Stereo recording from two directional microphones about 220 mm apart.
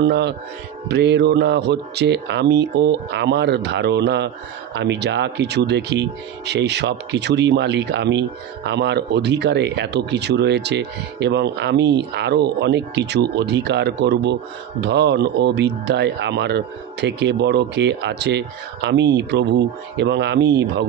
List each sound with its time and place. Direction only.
0.0 s speech: 50° right (ahead or behind)